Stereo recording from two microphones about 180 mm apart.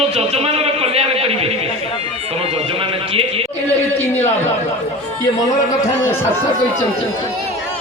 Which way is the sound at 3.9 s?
10° left (ahead or behind).